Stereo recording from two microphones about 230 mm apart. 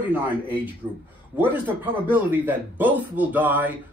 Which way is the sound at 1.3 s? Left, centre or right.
Centre.